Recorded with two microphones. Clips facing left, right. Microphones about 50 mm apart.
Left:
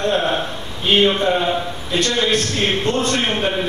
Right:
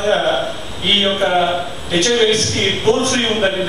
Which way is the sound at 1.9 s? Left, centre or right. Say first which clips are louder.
Right 4 dB; right.